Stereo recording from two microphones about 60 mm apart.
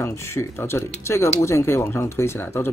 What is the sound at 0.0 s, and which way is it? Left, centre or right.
Speech, left.